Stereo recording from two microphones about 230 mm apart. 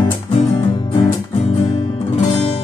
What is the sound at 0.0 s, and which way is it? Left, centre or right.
Music, left.